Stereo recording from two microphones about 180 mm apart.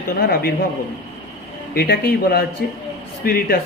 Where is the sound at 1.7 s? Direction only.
60° left (ahead or behind).